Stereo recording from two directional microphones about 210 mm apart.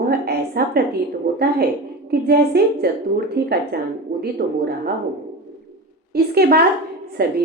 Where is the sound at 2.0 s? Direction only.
50° right (ahead or behind).